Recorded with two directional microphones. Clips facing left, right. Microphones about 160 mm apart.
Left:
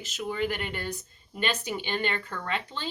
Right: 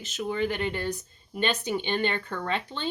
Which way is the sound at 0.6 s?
20° right (ahead or behind).